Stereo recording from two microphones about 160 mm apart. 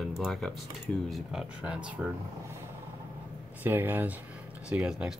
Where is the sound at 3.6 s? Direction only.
10° right (ahead or behind).